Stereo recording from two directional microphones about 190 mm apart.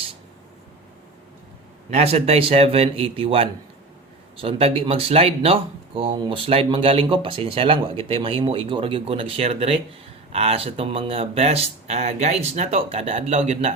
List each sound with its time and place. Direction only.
1.9 s speech: 35° right (ahead or behind)